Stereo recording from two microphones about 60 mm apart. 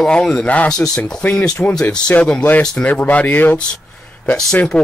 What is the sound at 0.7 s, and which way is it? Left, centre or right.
Speech, centre.